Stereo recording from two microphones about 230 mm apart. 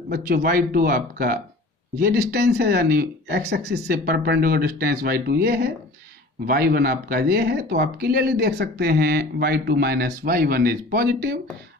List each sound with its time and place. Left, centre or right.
0.1 s speech: right